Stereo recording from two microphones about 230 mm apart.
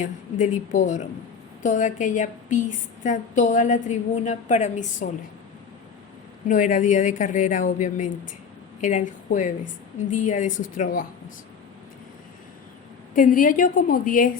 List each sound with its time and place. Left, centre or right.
0.0 s a woman's voice: left
6.5 s a woman's voice: left
13.1 s a woman's voice: left